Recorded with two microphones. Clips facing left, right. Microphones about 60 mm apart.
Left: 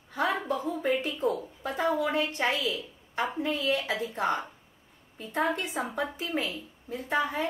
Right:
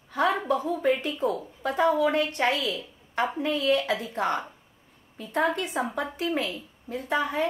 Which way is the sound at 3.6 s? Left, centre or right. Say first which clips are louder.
Right 4 dB; right.